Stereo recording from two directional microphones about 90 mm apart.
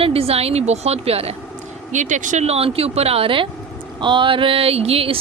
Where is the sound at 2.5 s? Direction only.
90° right.